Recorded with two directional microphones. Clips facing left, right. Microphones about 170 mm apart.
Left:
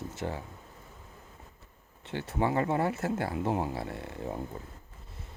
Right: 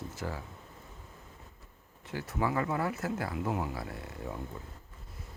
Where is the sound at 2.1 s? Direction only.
25° left (ahead or behind).